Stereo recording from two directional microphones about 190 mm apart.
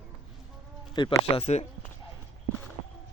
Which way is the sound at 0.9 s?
25° left (ahead or behind).